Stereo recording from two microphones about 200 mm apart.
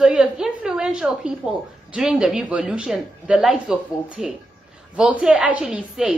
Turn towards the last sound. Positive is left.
turn(degrees=-5)  # may be behind; listen again after turning